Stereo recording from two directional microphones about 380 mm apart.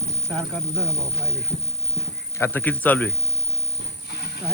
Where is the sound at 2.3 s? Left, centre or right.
Centre.